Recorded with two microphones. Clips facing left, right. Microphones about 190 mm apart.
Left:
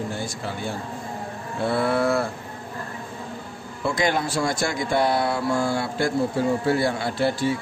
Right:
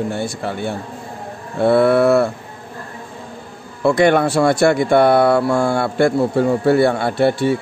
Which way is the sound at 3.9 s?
65° right (ahead or behind).